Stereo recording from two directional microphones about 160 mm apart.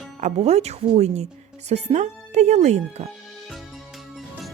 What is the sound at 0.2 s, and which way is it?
A woman's voice, 45° right (ahead or behind).